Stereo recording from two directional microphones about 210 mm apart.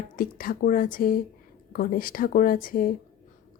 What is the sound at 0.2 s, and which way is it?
A woman's voice, 45° left (ahead or behind).